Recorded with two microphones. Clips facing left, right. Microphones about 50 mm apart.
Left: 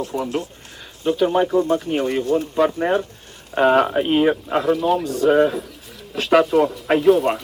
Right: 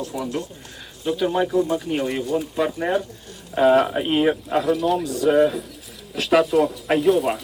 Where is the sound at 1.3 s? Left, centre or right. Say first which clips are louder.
Left 3 dB; centre.